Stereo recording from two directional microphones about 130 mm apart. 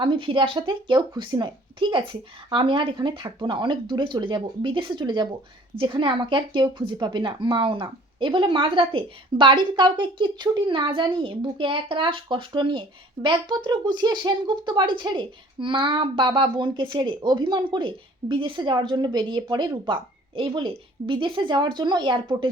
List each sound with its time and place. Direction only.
0.0 s a woman's voice: 40° right (ahead or behind)